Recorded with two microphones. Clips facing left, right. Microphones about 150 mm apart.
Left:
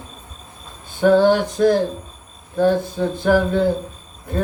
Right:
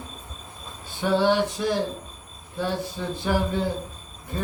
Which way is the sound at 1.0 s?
50° left (ahead or behind).